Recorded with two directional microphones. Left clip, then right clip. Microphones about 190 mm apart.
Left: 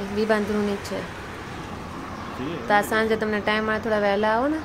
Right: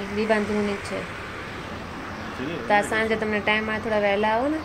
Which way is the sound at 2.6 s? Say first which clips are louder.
Left 1 dB; 15° left (ahead or behind).